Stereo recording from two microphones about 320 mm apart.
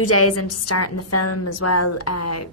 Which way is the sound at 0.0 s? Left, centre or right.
Left.